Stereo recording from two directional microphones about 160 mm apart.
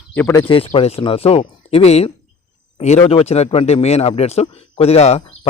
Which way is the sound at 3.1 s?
40° left (ahead or behind).